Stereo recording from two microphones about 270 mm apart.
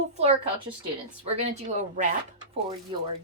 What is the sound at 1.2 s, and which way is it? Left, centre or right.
Speech, right.